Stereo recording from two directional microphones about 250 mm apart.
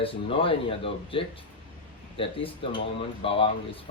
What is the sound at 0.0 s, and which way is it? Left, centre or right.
Speech, left.